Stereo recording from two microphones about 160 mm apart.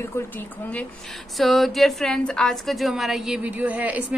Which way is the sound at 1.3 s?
Centre (ahead or behind).